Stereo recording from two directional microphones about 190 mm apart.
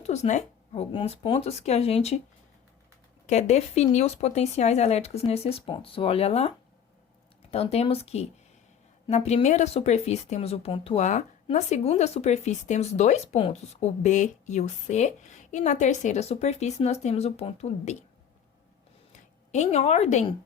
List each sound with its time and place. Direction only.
0.0 s speech: 35° left (ahead or behind)
3.2 s speech: 35° left (ahead or behind)
7.5 s speech: 35° left (ahead or behind)
19.5 s speech: 35° left (ahead or behind)